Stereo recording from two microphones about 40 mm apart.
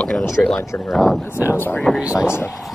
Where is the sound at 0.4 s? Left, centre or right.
Left.